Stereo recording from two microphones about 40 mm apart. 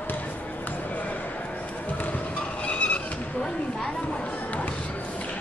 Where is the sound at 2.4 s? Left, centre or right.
Left.